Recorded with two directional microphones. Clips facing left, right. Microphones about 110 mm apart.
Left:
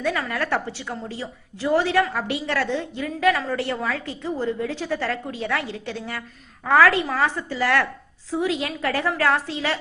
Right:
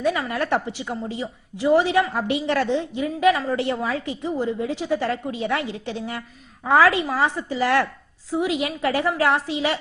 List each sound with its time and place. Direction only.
0.0 s a woman's voice: 15° right (ahead or behind)